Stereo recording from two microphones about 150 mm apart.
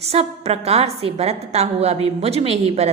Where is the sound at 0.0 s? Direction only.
45° right (ahead or behind).